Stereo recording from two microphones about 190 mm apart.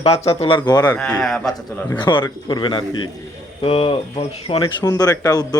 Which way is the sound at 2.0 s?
25° left (ahead or behind).